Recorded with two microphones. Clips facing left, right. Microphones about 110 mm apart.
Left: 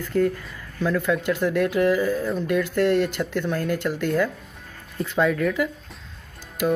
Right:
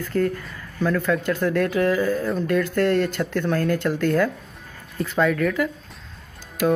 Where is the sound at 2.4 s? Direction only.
15° left (ahead or behind).